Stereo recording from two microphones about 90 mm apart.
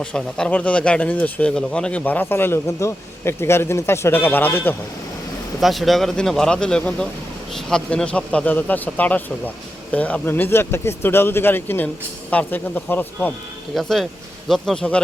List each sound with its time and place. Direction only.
0.0 s speech: 10° left (ahead or behind)
5.5 s speech: centre (ahead or behind); by 13.1 s 20° left (ahead or behind)
13.7 s speech: centre (ahead or behind)